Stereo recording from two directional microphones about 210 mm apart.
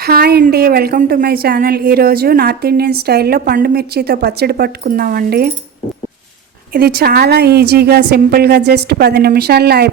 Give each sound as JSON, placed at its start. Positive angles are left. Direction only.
{"t": 0.0, "sound": "a woman's voice", "side_deg": -45}
{"t": 6.7, "sound": "a woman's voice", "side_deg": -45}